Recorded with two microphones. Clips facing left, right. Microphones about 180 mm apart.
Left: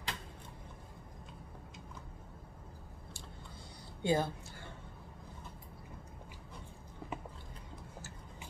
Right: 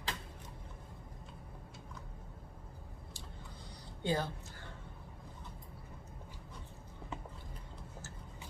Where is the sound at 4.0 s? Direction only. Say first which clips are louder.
Left 3 dB; 15° left (ahead or behind).